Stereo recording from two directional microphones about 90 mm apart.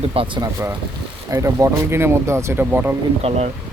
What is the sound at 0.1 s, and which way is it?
Speech, 90° right.